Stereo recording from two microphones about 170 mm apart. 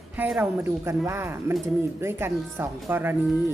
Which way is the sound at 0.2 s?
10° right (ahead or behind).